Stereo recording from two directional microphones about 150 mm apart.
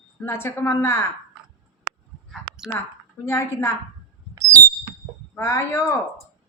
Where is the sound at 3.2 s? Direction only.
15° left (ahead or behind).